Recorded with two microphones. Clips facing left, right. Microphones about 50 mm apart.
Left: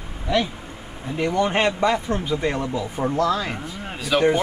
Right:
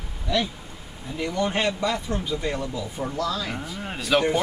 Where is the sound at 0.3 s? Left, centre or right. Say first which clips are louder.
Left 3 dB; left.